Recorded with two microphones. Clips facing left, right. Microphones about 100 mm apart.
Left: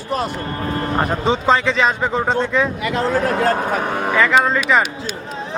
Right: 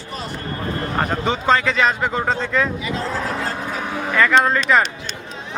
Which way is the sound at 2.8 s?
60° left (ahead or behind).